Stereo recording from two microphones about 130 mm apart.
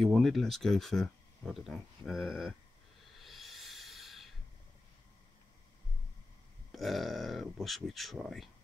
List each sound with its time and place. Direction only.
0.0 s speech: centre (ahead or behind)
3.2 s rub: centre (ahead or behind)
6.7 s speech: centre (ahead or behind)